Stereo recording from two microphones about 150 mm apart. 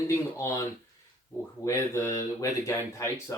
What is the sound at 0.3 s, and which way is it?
Speech, 20° left (ahead or behind).